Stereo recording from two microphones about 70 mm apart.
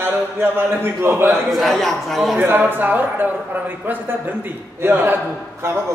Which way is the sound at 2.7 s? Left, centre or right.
Right.